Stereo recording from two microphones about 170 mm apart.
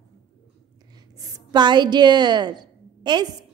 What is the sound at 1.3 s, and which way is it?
A woman's voice, 25° right (ahead or behind).